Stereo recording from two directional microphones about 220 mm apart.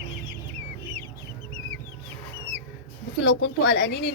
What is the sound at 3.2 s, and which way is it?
Speech, 50° left (ahead or behind).